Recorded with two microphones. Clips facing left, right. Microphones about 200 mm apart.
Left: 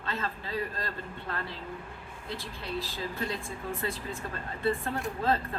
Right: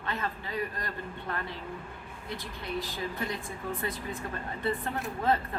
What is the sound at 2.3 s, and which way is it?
A man's voice, 20° right (ahead or behind).